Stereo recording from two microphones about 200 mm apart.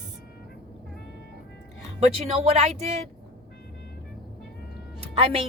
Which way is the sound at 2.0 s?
30° right (ahead or behind).